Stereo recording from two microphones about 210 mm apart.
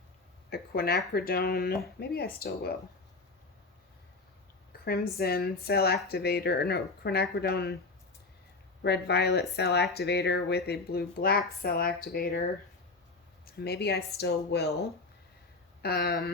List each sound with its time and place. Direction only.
0.5 s speech: 45° left (ahead or behind)
4.9 s speech: 45° left (ahead or behind)
8.8 s speech: 50° left (ahead or behind)
13.5 s speech: 50° left (ahead or behind)